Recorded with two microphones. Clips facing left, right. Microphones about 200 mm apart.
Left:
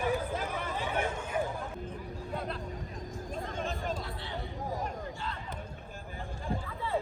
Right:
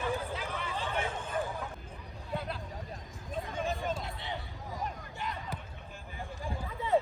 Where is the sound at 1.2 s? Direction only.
10° left (ahead or behind).